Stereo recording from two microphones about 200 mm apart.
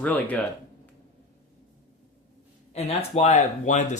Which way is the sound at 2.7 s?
35° left (ahead or behind).